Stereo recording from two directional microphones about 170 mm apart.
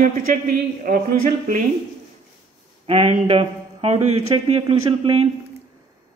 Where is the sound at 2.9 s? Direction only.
40° right (ahead or behind).